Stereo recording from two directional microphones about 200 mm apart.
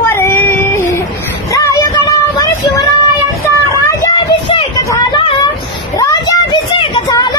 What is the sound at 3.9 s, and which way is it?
Vehicle, 15° left (ahead or behind).